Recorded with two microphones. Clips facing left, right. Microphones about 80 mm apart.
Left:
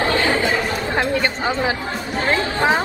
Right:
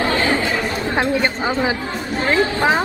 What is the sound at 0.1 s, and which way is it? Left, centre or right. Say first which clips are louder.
Chatter: even; right.